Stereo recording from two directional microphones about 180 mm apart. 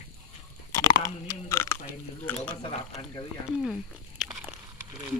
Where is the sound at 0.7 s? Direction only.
20° left (ahead or behind).